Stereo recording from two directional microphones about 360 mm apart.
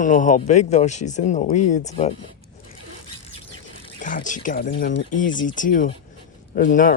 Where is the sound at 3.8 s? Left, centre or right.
Left.